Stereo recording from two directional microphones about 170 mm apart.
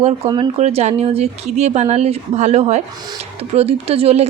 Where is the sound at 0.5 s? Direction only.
40° right (ahead or behind).